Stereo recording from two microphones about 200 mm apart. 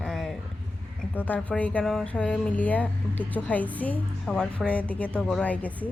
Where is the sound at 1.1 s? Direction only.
10° left (ahead or behind).